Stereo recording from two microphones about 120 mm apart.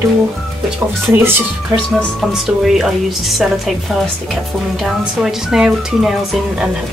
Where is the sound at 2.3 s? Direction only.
5° right (ahead or behind).